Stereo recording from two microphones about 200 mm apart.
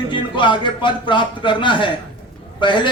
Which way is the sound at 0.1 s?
25° left (ahead or behind).